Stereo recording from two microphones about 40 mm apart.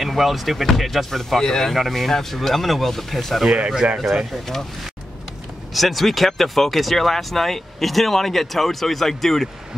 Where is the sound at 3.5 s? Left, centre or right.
Right.